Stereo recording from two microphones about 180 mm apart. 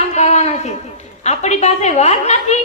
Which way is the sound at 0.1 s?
40° left (ahead or behind).